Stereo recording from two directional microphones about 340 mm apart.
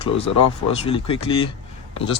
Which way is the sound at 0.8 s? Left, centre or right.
Centre.